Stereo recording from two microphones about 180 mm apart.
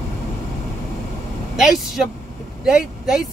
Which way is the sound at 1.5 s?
Centre (ahead or behind).